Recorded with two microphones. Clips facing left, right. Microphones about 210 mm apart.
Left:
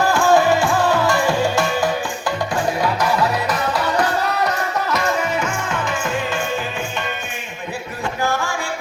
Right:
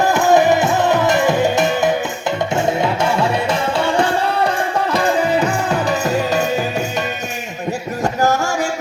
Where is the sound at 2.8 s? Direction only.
25° right (ahead or behind).